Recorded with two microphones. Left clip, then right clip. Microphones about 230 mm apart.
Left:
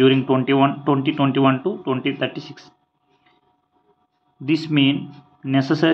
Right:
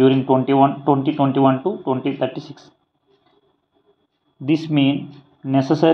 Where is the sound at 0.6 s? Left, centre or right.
Centre.